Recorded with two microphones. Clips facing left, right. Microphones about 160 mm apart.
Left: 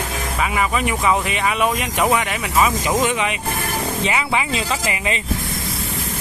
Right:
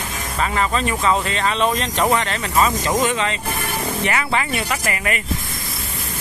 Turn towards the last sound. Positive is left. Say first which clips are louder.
# even
turn(degrees=15)  # may be behind; listen again after turning